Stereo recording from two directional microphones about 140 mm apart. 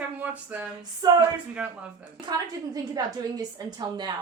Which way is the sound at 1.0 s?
30° right (ahead or behind).